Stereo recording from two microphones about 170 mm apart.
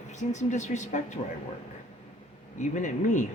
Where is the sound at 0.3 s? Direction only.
45° left (ahead or behind).